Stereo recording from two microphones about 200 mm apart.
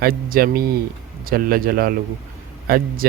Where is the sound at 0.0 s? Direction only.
45° right (ahead or behind).